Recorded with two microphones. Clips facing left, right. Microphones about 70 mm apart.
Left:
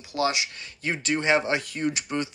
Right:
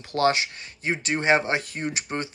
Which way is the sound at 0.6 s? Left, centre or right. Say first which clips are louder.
Right 2 dB; right.